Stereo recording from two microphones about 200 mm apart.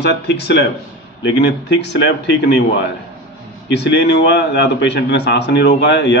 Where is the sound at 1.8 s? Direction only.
60° left (ahead or behind).